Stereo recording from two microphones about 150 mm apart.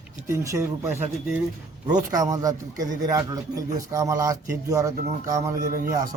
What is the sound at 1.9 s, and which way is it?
A man's voice, 25° right (ahead or behind).